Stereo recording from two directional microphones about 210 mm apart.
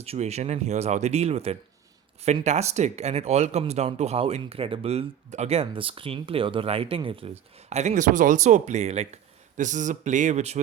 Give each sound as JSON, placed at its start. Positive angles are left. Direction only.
{"t": 0.0, "sound": "speech", "side_deg": -30}